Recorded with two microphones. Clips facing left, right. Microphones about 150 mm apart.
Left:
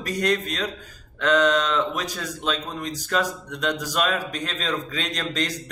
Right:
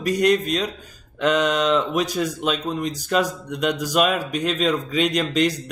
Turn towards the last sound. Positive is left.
turn(degrees=-15)  # may be behind; listen again after turning